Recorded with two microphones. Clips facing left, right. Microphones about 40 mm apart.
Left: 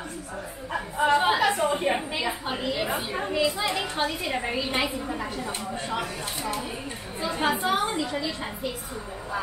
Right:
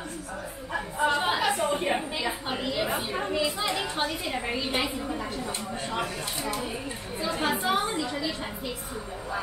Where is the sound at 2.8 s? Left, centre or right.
Centre.